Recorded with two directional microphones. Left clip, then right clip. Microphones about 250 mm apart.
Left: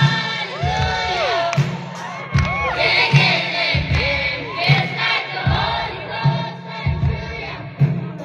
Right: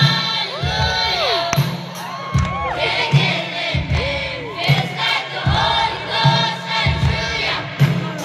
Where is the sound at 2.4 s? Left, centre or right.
Right.